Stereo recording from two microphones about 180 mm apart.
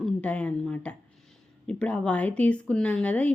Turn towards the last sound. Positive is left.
turn(degrees=5)  # may be behind; listen again after turning